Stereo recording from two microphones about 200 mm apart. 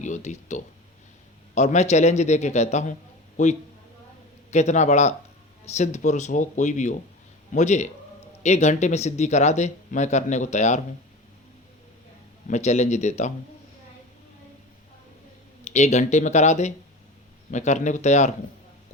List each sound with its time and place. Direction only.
0.0 s speech: 35° left (ahead or behind)
12.5 s speech: 35° left (ahead or behind)
15.6 s speech: 35° left (ahead or behind)